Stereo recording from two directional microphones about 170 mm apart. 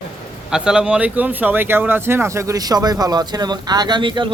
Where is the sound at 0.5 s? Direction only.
5° right (ahead or behind).